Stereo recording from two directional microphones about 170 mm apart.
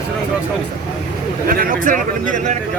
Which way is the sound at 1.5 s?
55° right (ahead or behind).